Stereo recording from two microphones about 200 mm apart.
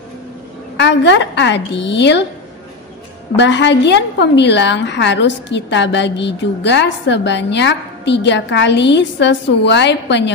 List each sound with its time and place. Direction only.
0.7 s a woman's voice: 60° left (ahead or behind)
3.3 s a woman's voice: 60° left (ahead or behind)